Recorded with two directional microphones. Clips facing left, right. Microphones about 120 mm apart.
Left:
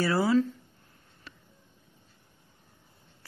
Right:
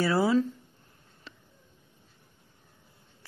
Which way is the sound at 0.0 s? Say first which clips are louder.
Even; 20° right (ahead or behind).